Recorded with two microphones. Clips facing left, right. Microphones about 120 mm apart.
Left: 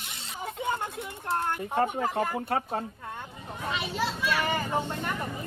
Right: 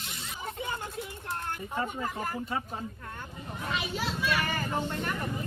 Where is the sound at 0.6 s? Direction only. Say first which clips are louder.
Left 6 dB; 60° left (ahead or behind).